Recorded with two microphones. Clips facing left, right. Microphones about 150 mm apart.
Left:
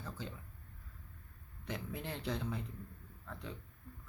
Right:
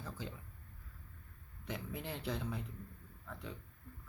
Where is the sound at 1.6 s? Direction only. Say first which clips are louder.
Left 1 dB; centre (ahead or behind).